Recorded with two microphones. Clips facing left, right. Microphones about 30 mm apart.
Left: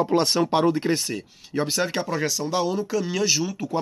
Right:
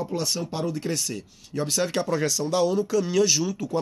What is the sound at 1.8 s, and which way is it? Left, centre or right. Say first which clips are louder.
Speech: even; centre.